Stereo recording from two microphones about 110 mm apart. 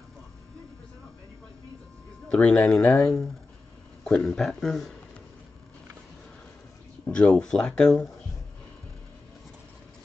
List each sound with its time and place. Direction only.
2.2 s a man's voice: 10° left (ahead or behind)
2.7 s speech: 20° left (ahead or behind)
4.0 s speech: 5° left (ahead or behind)
7.1 s speech: 10° left (ahead or behind)